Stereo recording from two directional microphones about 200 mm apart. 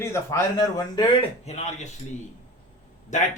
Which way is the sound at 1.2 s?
30° left (ahead or behind).